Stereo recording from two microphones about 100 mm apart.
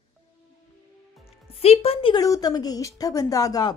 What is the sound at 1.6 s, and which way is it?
Speech, 80° left.